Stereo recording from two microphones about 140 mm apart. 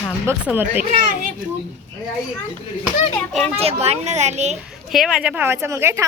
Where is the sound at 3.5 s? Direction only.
45° right (ahead or behind).